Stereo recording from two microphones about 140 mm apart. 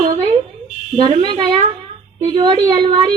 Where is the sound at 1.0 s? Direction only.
35° right (ahead or behind).